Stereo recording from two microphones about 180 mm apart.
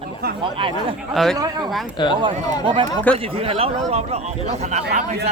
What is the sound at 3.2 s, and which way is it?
Speech, 30° right (ahead or behind).